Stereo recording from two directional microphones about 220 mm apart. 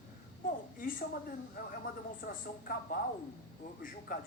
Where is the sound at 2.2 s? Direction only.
40° left (ahead or behind).